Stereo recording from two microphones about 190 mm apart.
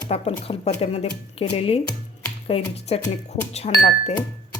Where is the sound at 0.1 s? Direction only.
30° left (ahead or behind).